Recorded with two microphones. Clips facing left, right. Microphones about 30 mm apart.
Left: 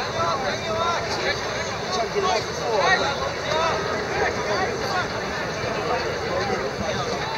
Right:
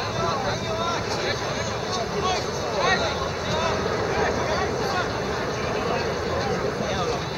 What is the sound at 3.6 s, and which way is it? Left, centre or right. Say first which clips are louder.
Vehicle: right 1 dB; centre.